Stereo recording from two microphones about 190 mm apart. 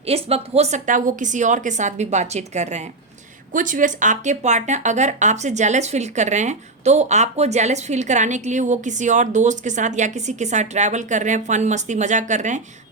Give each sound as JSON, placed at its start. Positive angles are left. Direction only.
{"t": 0.0, "sound": "speech", "side_deg": -30}